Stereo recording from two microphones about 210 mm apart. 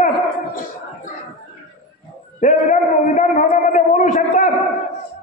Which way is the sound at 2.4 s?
35° left (ahead or behind).